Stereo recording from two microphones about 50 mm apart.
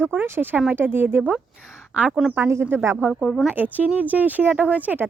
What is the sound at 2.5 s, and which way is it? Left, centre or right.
Speech, right.